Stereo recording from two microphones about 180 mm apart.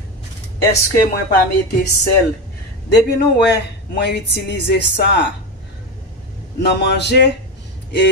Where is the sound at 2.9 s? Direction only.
65° left (ahead or behind).